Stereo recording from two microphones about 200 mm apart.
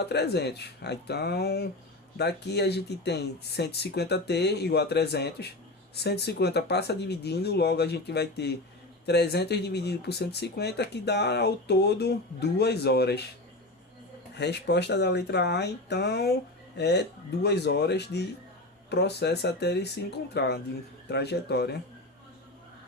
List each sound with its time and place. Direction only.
0.0 s speech: 55° left (ahead or behind)
14.3 s speech: 55° left (ahead or behind)